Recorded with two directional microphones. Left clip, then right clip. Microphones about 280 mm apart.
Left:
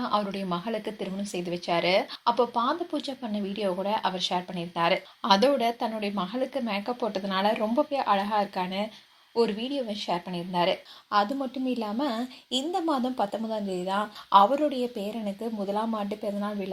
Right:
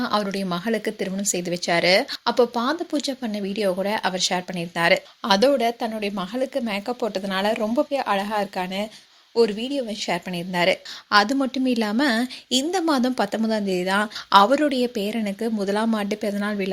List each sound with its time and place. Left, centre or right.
0.0 s speech: right